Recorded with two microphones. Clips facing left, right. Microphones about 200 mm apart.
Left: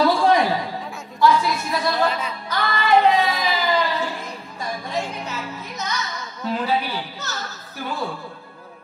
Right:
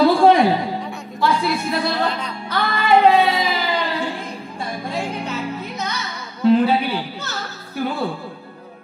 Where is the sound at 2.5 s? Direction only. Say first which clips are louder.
Right 2 dB; 30° right (ahead or behind).